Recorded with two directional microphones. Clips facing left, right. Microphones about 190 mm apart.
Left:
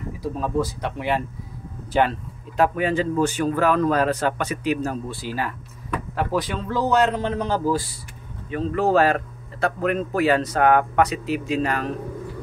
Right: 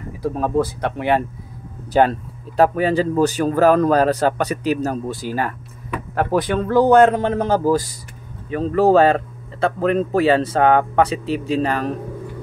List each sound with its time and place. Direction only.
0.2 s speech: 55° right (ahead or behind)
1.9 s a man's voice: 40° right (ahead or behind)